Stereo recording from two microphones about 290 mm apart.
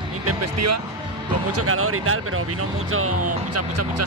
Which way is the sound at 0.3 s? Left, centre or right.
Right.